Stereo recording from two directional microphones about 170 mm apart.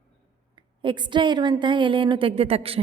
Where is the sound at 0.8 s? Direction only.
30° right (ahead or behind).